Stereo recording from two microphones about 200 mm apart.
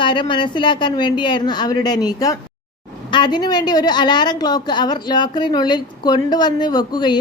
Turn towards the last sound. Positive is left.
turn(degrees=20)  # may be behind; listen again after turning